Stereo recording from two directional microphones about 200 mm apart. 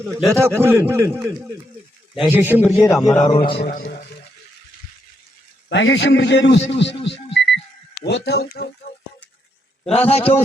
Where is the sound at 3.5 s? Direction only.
50° left (ahead or behind).